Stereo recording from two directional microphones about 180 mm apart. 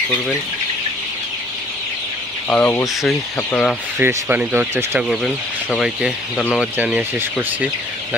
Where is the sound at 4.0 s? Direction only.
10° right (ahead or behind).